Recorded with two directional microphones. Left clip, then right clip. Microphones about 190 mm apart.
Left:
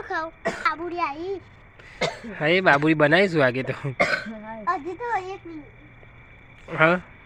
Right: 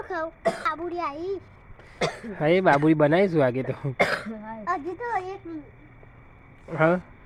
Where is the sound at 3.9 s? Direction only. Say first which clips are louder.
Left 1 dB; 40° right (ahead or behind).